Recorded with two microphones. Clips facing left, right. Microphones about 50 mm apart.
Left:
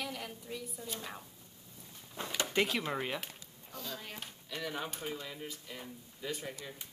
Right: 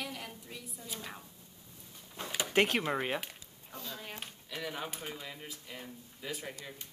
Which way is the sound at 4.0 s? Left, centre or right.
Centre.